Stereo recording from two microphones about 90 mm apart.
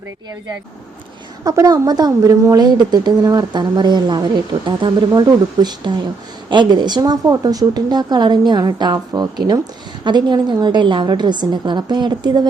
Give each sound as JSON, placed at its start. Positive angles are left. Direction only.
{"t": 1.5, "sound": "a woman's voice", "side_deg": -40}